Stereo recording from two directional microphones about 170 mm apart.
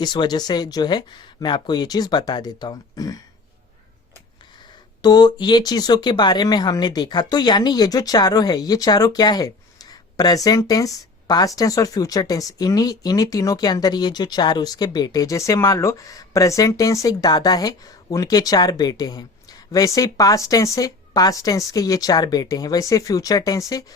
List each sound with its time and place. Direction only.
0.0 s speech: 25° left (ahead or behind)
5.0 s speech: 25° left (ahead or behind)